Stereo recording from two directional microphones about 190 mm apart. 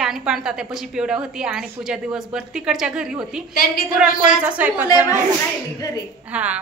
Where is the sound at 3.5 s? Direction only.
50° left (ahead or behind).